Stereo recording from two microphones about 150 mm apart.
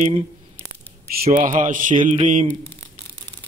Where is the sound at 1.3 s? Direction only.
60° right (ahead or behind).